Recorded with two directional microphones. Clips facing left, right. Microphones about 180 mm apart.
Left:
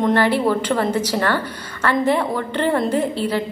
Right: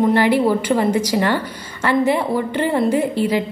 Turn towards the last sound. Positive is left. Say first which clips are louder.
# right 2 dB
turn(degrees=-10)  # may be behind; listen again after turning